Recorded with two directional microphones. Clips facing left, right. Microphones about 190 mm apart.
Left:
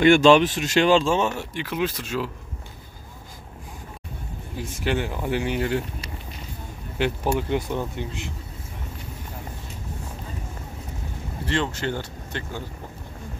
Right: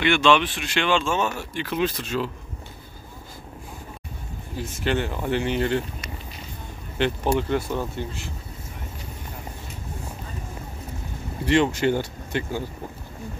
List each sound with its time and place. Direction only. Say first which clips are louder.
0.0 s speech: left 5 dB; 40° left (ahead or behind); by 2.3 s 10° left (ahead or behind)
4.6 s speech: right 1 dB; 10° left (ahead or behind)
7.0 s speech: right 1 dB; 10° left (ahead or behind)
11.4 s speech: right 6 dB; 15° right (ahead or behind)